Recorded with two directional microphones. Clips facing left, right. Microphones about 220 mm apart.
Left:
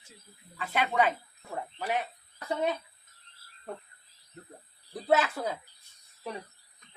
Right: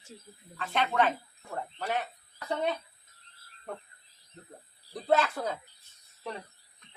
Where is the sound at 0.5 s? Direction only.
10° left (ahead or behind).